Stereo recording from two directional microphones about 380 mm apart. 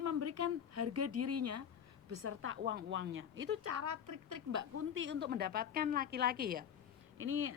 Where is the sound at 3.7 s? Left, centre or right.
Right.